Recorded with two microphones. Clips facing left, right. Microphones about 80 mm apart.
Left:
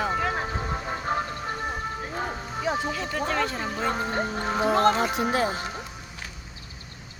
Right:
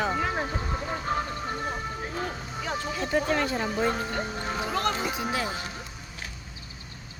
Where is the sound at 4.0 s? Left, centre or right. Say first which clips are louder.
Left 4 dB; left.